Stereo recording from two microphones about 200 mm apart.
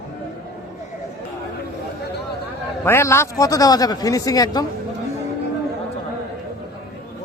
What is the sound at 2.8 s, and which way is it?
A man's voice, 15° left (ahead or behind).